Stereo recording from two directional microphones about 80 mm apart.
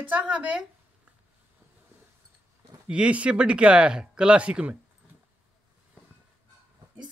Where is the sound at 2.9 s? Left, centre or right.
Centre.